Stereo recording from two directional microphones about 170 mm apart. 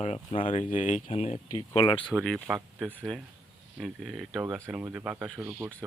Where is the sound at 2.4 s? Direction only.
5° right (ahead or behind).